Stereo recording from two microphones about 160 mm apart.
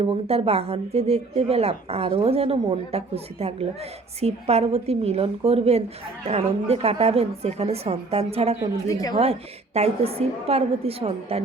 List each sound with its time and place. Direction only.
0.0 s a woman's voice: 40° right (ahead or behind)
8.9 s speech: 25° left (ahead or behind)
9.1 s a woman's voice: 40° right (ahead or behind)